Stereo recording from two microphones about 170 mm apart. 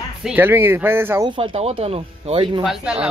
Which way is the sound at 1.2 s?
30° right (ahead or behind).